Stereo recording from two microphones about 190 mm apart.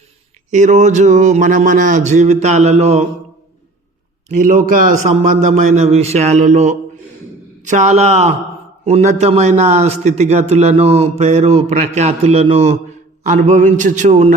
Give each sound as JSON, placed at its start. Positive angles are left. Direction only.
{"t": 0.5, "sound": "a man's voice", "side_deg": -40}
{"t": 4.4, "sound": "a man's voice", "side_deg": -45}